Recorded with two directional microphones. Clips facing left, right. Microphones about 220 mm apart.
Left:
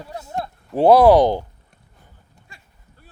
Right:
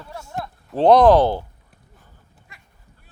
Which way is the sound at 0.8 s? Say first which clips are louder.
Left 1 dB; 10° left (ahead or behind).